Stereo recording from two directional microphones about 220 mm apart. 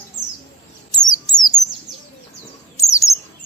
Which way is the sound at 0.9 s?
20° left (ahead or behind).